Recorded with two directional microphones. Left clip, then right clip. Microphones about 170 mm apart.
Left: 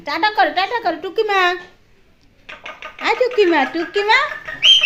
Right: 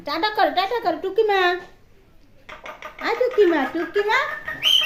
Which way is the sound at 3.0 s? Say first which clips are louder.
Left 3 dB; 20° left (ahead or behind).